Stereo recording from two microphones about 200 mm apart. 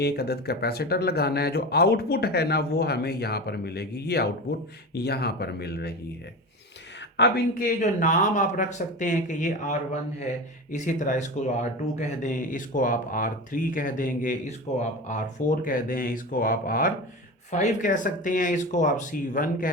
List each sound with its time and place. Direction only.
0.0 s speech: 55° left (ahead or behind)
7.2 s speech: 50° left (ahead or behind)
7.8 s speech: 40° left (ahead or behind)